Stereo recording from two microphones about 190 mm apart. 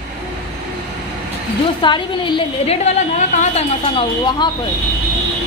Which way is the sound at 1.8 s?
25° left (ahead or behind).